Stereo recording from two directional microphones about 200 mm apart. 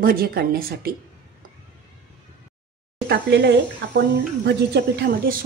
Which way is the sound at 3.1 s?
55° right (ahead or behind).